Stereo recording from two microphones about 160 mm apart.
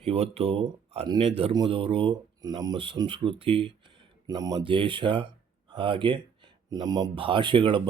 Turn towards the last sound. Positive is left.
turn(degrees=-30)  # may be behind; listen again after turning